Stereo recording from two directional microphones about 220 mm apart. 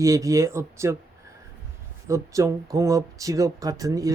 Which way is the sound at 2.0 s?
15° right (ahead or behind).